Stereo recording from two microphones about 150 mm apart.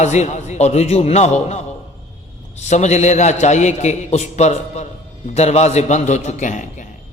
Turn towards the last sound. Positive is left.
turn(degrees=55)  # may be behind; listen again after turning